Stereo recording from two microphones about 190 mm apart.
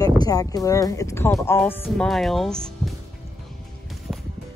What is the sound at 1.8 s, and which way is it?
Speech, centre (ahead or behind).